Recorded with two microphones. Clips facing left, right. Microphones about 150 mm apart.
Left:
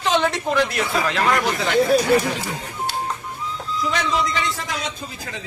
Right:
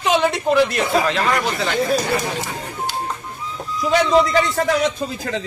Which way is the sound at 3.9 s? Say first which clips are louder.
Right 10 dB; 35° right (ahead or behind).